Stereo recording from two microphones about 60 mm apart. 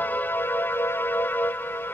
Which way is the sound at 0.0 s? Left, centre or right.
Left.